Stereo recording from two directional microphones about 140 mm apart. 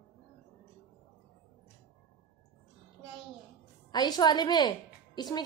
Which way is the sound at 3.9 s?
30° left (ahead or behind).